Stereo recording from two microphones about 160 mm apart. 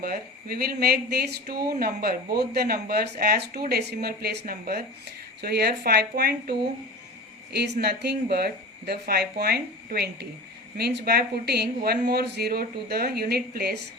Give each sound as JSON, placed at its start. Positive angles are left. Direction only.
{"t": 0.0, "sound": "speech", "side_deg": -65}
{"t": 5.4, "sound": "speech", "side_deg": -80}